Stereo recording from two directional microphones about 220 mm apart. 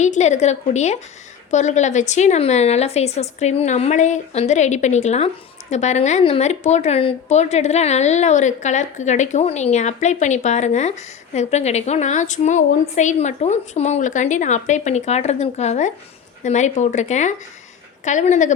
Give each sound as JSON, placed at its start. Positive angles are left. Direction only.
{"t": 0.0, "sound": "a woman's voice", "side_deg": 30}